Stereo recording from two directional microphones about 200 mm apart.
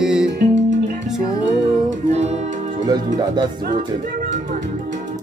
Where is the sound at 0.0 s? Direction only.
5° right (ahead or behind).